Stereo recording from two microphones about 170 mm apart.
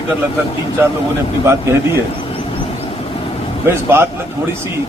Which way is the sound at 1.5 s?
15° right (ahead or behind).